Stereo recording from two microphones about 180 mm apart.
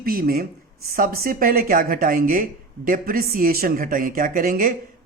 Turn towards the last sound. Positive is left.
turn(degrees=-50)  # may be behind; listen again after turning